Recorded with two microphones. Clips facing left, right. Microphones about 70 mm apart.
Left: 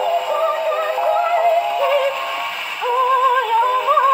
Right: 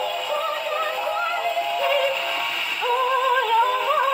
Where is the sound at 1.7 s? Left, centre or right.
Centre.